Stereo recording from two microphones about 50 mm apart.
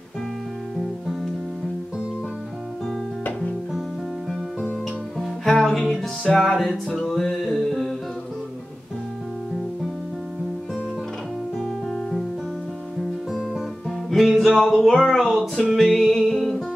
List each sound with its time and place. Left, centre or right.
5.2 s music: centre
6.3 s a sound: centre
7.0 s music: centre
11.6 s music: centre
13.3 s music: centre
14.8 s a sound: centre
15.4 s music: centre